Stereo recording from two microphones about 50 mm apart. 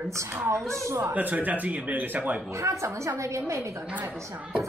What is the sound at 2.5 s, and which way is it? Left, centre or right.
A woman's voice, right.